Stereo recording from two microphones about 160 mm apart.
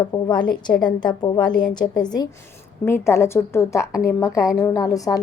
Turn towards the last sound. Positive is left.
turn(degrees=20)  # may be behind; listen again after turning